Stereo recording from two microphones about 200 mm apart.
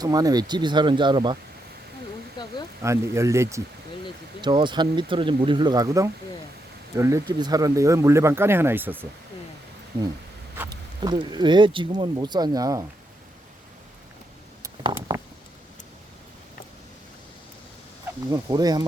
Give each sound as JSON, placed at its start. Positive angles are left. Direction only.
{"t": 0.0, "sound": "speech", "side_deg": -20}
{"t": 2.4, "sound": "a sound", "side_deg": 20}
{"t": 2.8, "sound": "speech", "side_deg": -15}
{"t": 10.6, "sound": "speech", "side_deg": -20}
{"t": 14.6, "sound": "a sound", "side_deg": -15}
{"t": 18.3, "sound": "speech", "side_deg": -20}